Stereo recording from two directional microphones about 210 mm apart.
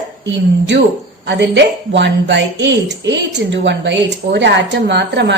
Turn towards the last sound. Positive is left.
turn(degrees=-55)  # may be behind; listen again after turning